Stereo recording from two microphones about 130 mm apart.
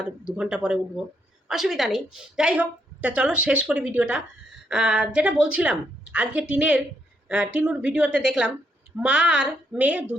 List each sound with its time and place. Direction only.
0.3 s a woman's voice: 5° right (ahead or behind)